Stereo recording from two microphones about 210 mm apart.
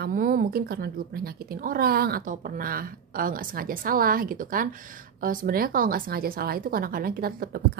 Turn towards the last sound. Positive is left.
turn(degrees=-45)  # may be behind; listen again after turning